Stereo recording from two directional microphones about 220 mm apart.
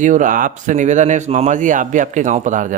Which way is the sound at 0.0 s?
35° right (ahead or behind).